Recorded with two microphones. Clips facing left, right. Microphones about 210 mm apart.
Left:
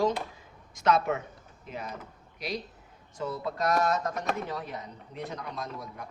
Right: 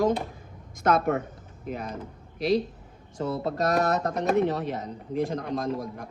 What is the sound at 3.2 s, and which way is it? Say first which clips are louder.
Speech: right 5 dB; 45° right (ahead or behind).